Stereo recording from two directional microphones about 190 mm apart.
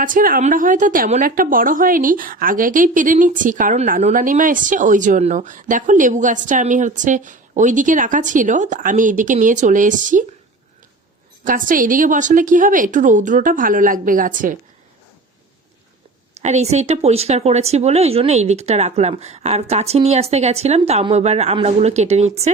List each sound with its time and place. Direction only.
0.0 s speech: 45° right (ahead or behind)
11.4 s speech: 45° right (ahead or behind)
16.4 s speech: 35° right (ahead or behind)